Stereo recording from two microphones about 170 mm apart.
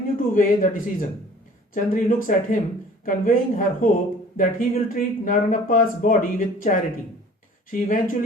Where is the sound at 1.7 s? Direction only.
50° left (ahead or behind).